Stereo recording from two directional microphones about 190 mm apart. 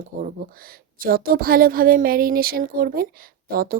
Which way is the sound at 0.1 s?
45° right (ahead or behind).